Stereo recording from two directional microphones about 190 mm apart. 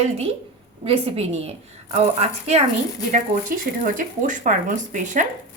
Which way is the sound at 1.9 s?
35° right (ahead or behind).